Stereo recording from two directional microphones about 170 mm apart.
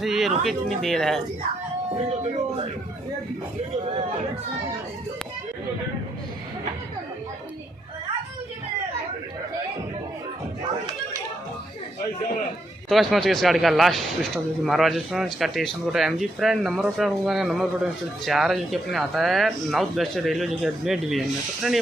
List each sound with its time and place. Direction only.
0.0 s speech: centre (ahead or behind)
2.0 s speech: 40° right (ahead or behind)
12.9 s speech: centre (ahead or behind)